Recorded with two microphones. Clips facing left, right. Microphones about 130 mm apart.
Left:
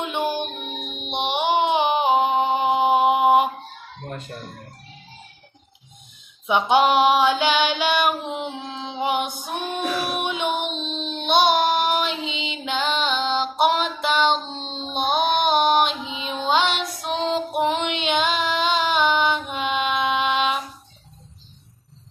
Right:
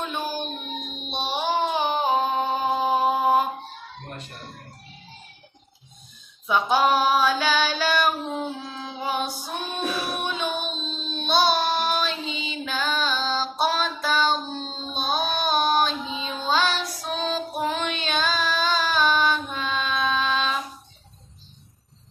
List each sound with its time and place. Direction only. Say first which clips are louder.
0.0 s music: left 4 dB; 20° left (ahead or behind)
6.5 s female singing: left 3 dB; 25° left (ahead or behind)
9.4 s child singing: left 3 dB; 15° left (ahead or behind)